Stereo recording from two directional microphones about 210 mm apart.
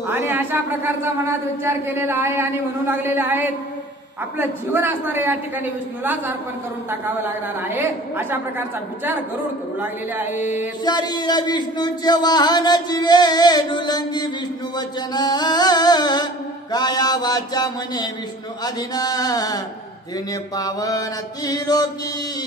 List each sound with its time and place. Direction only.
0.1 s a woman's voice: 10° right (ahead or behind)
6.9 s a woman's voice: 10° right (ahead or behind)
10.8 s a sound: 20° left (ahead or behind)
18.6 s speech: 20° left (ahead or behind)